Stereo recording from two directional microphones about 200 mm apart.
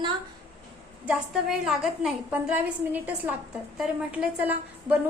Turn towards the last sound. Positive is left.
turn(degrees=-10)  # may be behind; listen again after turning